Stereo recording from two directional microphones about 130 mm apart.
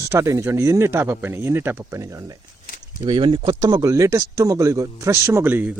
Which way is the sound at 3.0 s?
40° right (ahead or behind).